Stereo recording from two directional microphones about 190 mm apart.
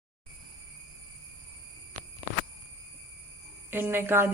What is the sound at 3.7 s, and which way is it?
Speech, 10° right (ahead or behind).